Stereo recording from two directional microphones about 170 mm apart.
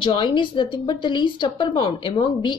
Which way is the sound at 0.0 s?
30° left (ahead or behind).